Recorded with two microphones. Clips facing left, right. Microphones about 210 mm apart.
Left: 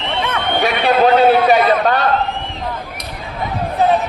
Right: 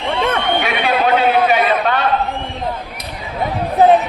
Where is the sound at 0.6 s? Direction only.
40° left (ahead or behind).